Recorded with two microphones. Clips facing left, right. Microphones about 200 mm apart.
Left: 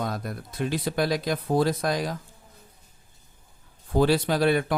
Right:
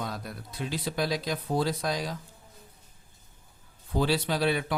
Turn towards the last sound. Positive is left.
turn(degrees=50)  # may be behind; listen again after turning